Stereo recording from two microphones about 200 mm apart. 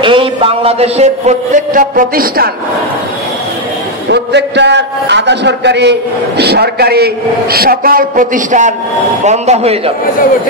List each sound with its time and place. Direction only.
0.0 s a man's voice: 25° right (ahead or behind); by 2.5 s 50° right (ahead or behind)
4.1 s a man's voice: 60° right (ahead or behind); by 9.9 s 30° right (ahead or behind)